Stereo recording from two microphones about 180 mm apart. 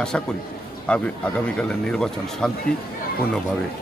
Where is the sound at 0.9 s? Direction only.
5° left (ahead or behind).